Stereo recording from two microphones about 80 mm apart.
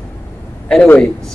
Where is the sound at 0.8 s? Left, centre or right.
Centre.